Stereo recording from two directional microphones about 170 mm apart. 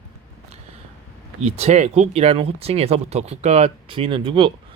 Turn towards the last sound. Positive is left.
turn(degrees=-30)  # may be behind; listen again after turning